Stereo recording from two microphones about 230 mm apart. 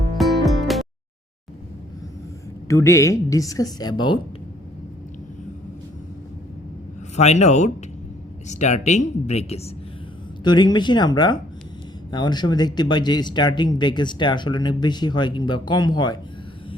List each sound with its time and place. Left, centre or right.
0.2 s music: centre
2.6 s a woman's voice: centre
7.2 s speech: left